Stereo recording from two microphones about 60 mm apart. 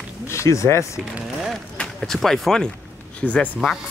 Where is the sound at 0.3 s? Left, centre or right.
Left.